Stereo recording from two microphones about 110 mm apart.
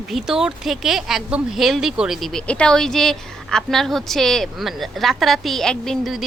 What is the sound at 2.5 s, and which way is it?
A woman's voice, 10° left (ahead or behind).